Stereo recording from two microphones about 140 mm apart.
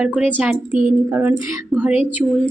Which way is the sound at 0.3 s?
10° right (ahead or behind).